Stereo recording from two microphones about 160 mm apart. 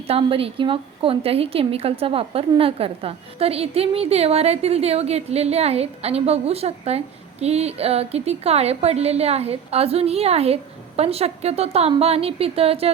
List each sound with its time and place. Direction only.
0.1 s a woman's voice: 35° right (ahead or behind)